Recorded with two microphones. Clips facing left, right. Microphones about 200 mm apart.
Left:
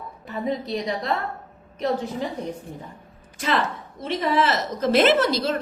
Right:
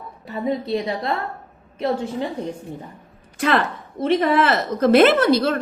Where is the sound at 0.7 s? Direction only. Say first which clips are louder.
Right 3 dB; 30° right (ahead or behind).